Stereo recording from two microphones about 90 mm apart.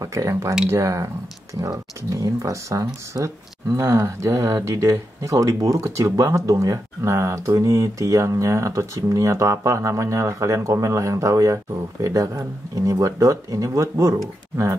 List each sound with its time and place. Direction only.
0.0 s speech: 35° right (ahead or behind)